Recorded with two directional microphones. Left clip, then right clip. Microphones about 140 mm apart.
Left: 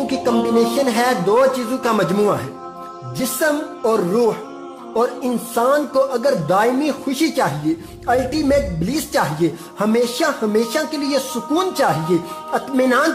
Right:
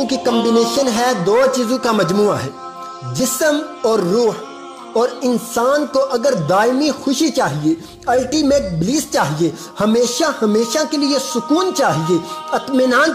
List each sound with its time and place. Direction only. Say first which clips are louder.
0.0 s music: right 2 dB; 35° right (ahead or behind)
0.3 s music: right 2 dB; 5° right (ahead or behind)
0.8 s speech: right 1 dB; 30° right (ahead or behind)
3.2 s speech: right 3 dB; 30° right (ahead or behind)
11.0 s music: right 3 dB; centre (ahead or behind)
11.5 s speech: right 2 dB; 30° right (ahead or behind)
12.5 s speech: right 2 dB; 5° right (ahead or behind)